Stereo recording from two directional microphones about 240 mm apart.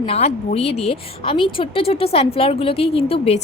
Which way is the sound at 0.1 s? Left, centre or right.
Left.